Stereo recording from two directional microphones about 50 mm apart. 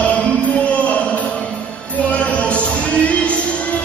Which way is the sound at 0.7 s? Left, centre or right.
Left.